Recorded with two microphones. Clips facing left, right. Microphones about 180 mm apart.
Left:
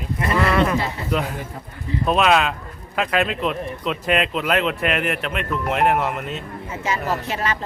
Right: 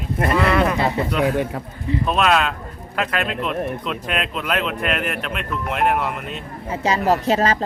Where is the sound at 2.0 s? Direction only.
Centre (ahead or behind).